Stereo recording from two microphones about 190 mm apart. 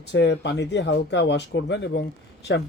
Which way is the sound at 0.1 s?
65° left (ahead or behind).